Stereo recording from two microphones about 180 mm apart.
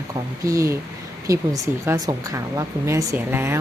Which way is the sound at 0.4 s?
15° right (ahead or behind).